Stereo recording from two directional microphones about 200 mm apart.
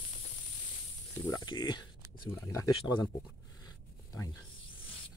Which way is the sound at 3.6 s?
15° left (ahead or behind).